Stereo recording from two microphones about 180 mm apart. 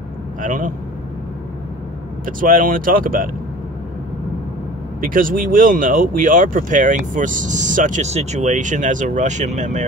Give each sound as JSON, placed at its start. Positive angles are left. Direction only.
{"t": 0.4, "sound": "speech", "side_deg": -45}
{"t": 2.2, "sound": "speech", "side_deg": -50}
{"t": 5.0, "sound": "speech", "side_deg": -50}